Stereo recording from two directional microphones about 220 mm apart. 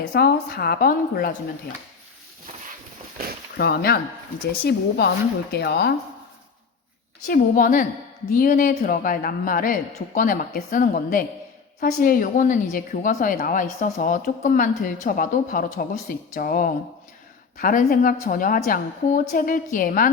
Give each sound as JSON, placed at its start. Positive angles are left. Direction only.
{"t": 0.1, "sound": "speech", "side_deg": 45}
{"t": 3.6, "sound": "speech", "side_deg": 45}
{"t": 7.3, "sound": "a woman's voice", "side_deg": 40}